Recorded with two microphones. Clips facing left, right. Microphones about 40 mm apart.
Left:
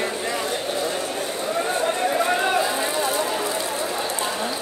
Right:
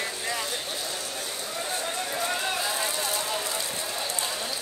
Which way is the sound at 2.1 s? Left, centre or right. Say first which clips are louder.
Left 6 dB; left.